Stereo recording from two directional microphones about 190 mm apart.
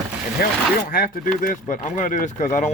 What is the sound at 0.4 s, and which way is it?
Speech, 55° left (ahead or behind).